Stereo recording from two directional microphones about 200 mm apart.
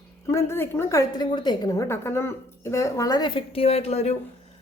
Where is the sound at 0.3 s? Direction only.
15° left (ahead or behind).